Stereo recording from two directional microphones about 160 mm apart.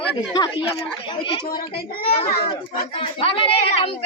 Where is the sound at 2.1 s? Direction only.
35° left (ahead or behind).